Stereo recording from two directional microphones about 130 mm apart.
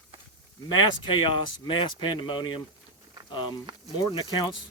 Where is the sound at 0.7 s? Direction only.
35° left (ahead or behind).